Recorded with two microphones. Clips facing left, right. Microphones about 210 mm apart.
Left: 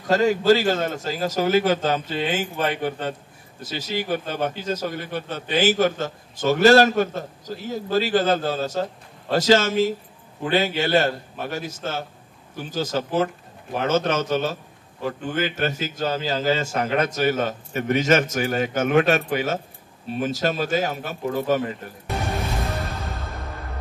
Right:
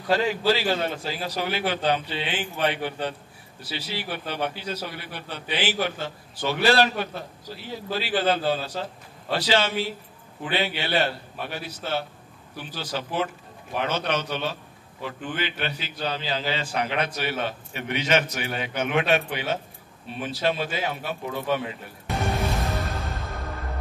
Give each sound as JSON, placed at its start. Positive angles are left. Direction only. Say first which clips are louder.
{"t": 0.1, "sound": "a man's voice", "louder": "left 5 dB", "side_deg": 45}
{"t": 22.0, "sound": "music", "louder": "right 1 dB", "side_deg": 0}